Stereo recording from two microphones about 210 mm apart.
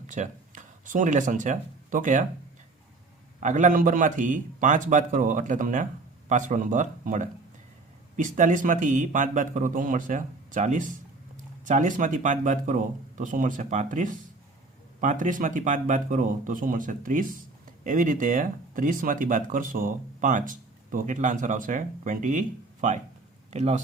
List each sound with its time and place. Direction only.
0.1 s speech: 35° right (ahead or behind)
3.4 s speech: 35° right (ahead or behind)